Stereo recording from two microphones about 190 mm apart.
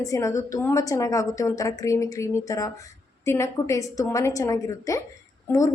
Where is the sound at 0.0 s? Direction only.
15° left (ahead or behind).